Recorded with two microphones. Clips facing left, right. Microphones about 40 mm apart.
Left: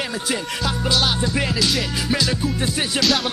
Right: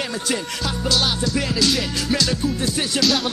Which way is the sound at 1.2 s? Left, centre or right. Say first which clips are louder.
Left 1 dB; left.